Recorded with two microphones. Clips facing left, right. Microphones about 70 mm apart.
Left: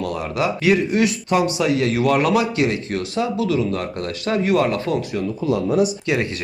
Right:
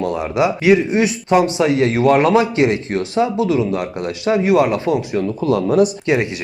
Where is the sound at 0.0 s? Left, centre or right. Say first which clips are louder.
Right 5 dB; right.